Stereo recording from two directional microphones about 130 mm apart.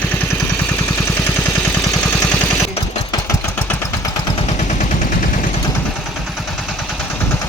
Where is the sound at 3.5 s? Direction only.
15° left (ahead or behind).